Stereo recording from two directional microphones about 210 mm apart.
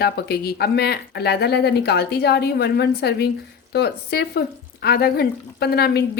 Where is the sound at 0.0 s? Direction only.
50° left (ahead or behind).